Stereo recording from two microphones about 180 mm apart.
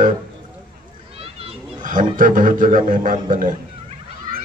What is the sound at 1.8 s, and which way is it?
A man's voice, 50° right (ahead or behind).